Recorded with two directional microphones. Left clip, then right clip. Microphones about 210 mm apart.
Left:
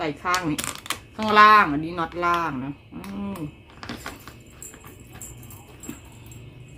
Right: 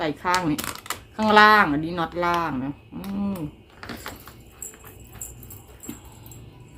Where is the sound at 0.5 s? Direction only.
5° left (ahead or behind).